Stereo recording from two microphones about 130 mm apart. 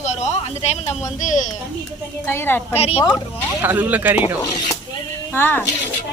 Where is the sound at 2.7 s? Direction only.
50° left (ahead or behind).